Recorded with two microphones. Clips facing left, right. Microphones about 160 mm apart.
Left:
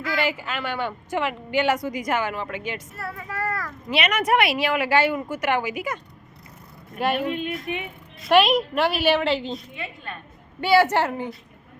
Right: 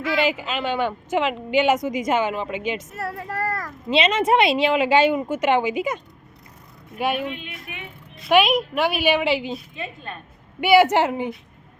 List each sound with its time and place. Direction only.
0.0 s a woman's voice: 20° right (ahead or behind)
3.0 s speech: 35° right (ahead or behind)
3.5 s a woman's voice: 25° right (ahead or behind)
7.0 s a woman's voice: centre (ahead or behind)
7.7 s speech: 30° left (ahead or behind)
8.2 s a woman's voice: 5° right (ahead or behind)
9.7 s a woman's voice: 25° right (ahead or behind)